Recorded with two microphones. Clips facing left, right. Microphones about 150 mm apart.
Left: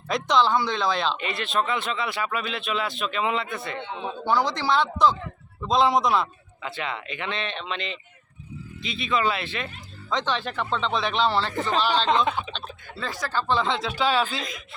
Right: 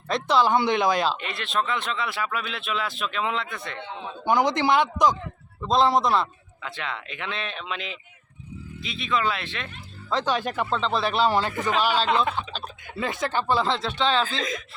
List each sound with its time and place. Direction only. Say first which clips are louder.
0.1 s speech: even; 5° right (ahead or behind)
0.5 s speech: right 3 dB; 20° right (ahead or behind); by 3.8 s 5° left (ahead or behind)
4.3 s a man's voice: right 3 dB; 20° right (ahead or behind)
5.6 s a man's voice: even; centre (ahead or behind); by 13.4 s 20° right (ahead or behind)
13.5 s speech: left 1 dB; 5° right (ahead or behind)